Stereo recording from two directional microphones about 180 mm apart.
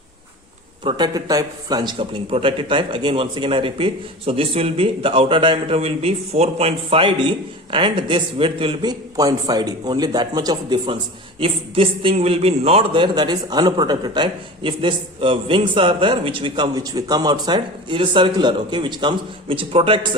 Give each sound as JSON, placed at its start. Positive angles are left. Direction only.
{"t": 0.9, "sound": "a man's voice", "side_deg": -25}